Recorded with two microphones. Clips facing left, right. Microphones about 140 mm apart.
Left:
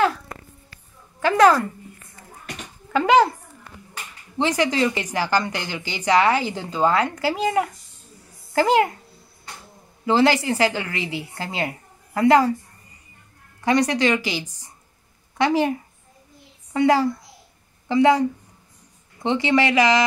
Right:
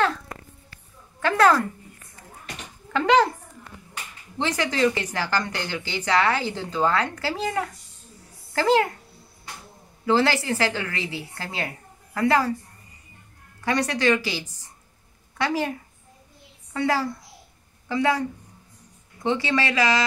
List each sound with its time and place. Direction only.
1.2 s a woman's voice: 10° left (ahead or behind)
2.9 s speech: 10° left (ahead or behind)
4.4 s a woman's voice: 15° left (ahead or behind)
10.0 s a woman's voice: 15° left (ahead or behind)
13.7 s a woman's voice: 15° left (ahead or behind)
16.7 s a woman's voice: 20° left (ahead or behind)
19.2 s a woman's voice: 20° left (ahead or behind)